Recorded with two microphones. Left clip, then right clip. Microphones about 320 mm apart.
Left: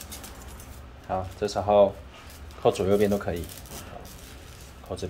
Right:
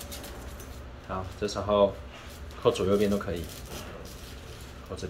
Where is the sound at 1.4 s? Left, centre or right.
Centre.